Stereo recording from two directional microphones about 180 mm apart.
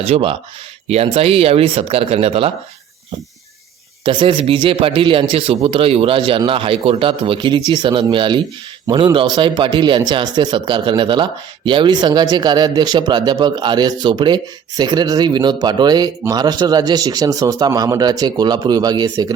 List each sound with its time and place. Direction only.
0.0 s speech: 30° right (ahead or behind)
4.0 s speech: 25° right (ahead or behind)